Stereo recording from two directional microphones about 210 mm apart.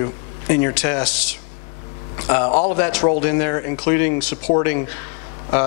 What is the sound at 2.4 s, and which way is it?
Speech, 20° left (ahead or behind).